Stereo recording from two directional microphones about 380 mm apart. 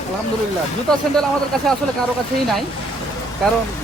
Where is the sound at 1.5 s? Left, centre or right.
Centre.